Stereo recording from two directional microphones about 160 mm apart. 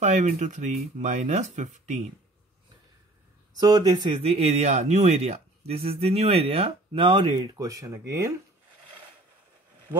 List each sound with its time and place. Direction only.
0.0 s speech: 50° right (ahead or behind)
3.5 s speech: 25° right (ahead or behind)